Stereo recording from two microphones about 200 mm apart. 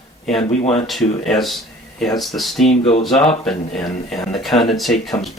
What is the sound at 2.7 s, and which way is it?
Speech, 35° left (ahead or behind).